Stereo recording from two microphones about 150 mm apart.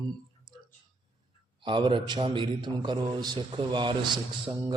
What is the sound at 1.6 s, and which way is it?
A man's voice, 35° right (ahead or behind).